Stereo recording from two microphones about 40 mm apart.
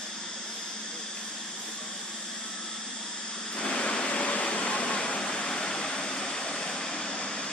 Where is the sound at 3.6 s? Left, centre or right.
Left.